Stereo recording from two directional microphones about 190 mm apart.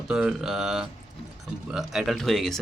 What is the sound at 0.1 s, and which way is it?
A man's voice, 5° right (ahead or behind).